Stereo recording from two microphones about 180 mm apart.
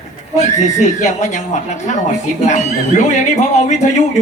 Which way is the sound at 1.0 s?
40° left (ahead or behind).